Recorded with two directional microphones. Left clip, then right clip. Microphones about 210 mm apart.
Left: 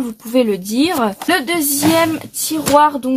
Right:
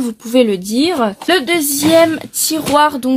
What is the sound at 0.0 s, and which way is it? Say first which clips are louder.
Speech: right 3 dB; 35° right (ahead or behind).